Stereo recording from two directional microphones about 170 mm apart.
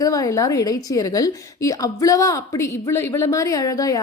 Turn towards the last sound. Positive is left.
turn(degrees=20)  # may be behind; listen again after turning